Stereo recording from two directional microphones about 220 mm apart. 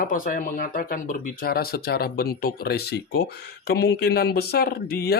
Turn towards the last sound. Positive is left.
turn(degrees=45)  # may be behind; listen again after turning